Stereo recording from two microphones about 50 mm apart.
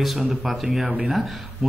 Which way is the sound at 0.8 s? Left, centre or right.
Right.